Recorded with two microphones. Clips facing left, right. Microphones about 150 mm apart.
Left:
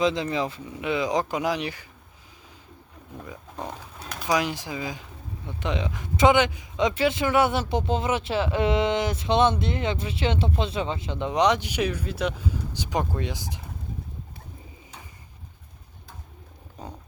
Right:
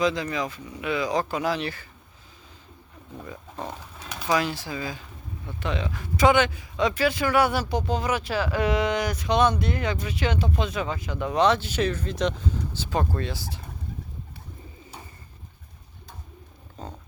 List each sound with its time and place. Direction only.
0.0 s speech: 25° left (ahead or behind)
4.3 s speech: 15° left (ahead or behind)
16.8 s a sound: 10° left (ahead or behind)